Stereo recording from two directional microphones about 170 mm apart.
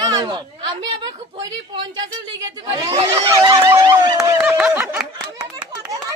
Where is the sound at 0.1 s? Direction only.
25° right (ahead or behind).